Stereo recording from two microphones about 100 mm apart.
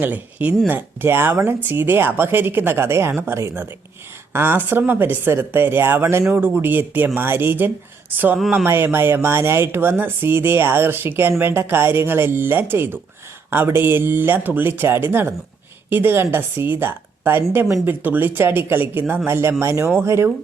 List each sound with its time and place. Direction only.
0.0 s speech: 15° right (ahead or behind)